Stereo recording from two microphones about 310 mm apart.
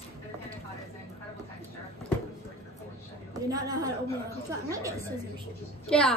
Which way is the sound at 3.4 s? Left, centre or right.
Centre.